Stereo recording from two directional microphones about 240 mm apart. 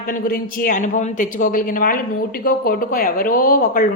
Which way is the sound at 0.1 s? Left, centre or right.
Left.